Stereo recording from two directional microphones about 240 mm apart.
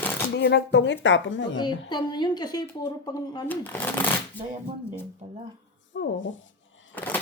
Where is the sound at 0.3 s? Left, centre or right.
Left.